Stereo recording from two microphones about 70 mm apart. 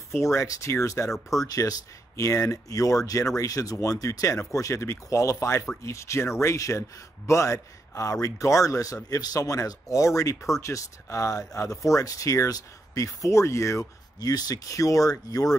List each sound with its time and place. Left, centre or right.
0.1 s speech: left
1.1 s speech: centre
1.5 s speech: left
14.2 s speech: left